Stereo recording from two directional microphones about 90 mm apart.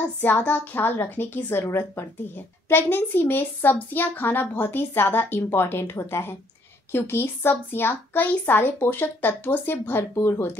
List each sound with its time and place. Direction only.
0.2 s a woman's voice: 20° left (ahead or behind)